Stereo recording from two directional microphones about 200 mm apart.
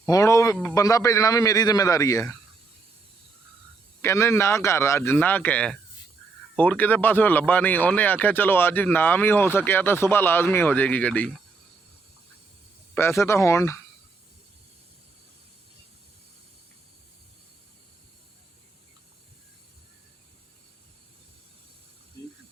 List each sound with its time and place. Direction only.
0.0 s a sound: 15° left (ahead or behind)
0.5 s speech: 15° left (ahead or behind)
4.0 s speech: 15° left (ahead or behind)
12.9 s speech: 10° left (ahead or behind)